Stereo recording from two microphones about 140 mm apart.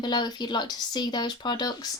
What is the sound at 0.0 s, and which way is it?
Speech, 30° left (ahead or behind).